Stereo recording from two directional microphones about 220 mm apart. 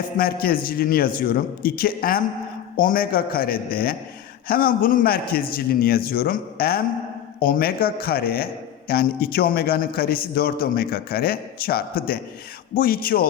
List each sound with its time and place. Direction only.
0.2 s a man's voice: 45° left (ahead or behind)